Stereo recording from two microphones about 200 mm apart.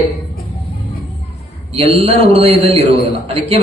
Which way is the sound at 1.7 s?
30° right (ahead or behind).